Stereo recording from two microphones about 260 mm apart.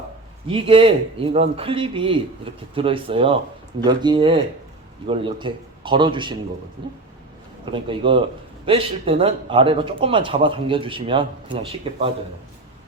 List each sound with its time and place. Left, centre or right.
0.4 s a man's voice: right
7.6 s a man's voice: centre